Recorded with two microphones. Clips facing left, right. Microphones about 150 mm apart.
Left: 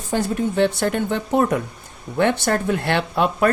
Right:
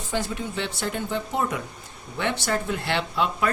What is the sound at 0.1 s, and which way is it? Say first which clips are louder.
Speech: left 8 dB; 50° left (ahead or behind).